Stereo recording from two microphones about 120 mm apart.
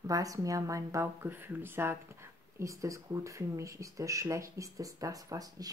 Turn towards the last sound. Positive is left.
turn(degrees=-30)  # may be behind; listen again after turning